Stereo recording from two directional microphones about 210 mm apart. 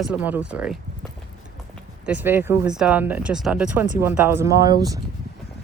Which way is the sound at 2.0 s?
10° right (ahead or behind).